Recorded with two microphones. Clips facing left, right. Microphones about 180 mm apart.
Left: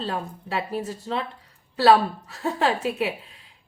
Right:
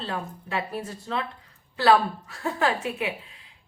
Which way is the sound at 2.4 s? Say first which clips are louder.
Left 2 dB; 30° left (ahead or behind).